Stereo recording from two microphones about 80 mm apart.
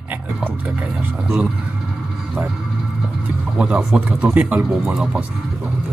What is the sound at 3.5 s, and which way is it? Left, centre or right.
Speech, centre.